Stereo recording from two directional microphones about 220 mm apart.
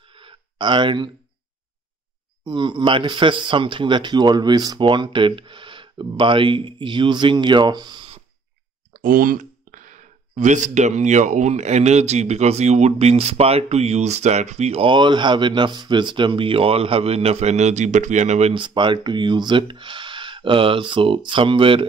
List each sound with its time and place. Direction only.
0.0 s a sound: 25° right (ahead or behind)
2.4 s speech: 20° right (ahead or behind)
8.9 s speech: 40° right (ahead or behind); by 21.8 s 25° right (ahead or behind)